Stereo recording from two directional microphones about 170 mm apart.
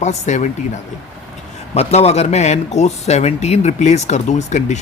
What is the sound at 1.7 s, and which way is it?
A man's voice, 40° left (ahead or behind).